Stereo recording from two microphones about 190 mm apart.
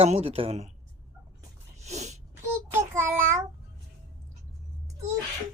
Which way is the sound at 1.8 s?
35° right (ahead or behind).